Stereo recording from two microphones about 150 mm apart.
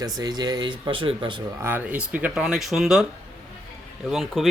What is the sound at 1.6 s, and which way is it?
A man's voice, 10° right (ahead or behind).